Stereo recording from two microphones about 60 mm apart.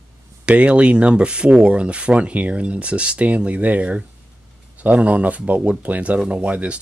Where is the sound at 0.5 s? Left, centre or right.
Right.